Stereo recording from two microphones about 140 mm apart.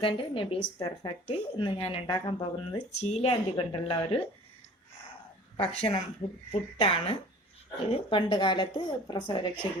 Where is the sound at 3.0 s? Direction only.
50° left (ahead or behind).